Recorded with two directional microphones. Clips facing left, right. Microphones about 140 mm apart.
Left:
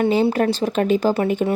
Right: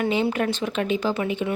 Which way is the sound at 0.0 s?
35° left (ahead or behind).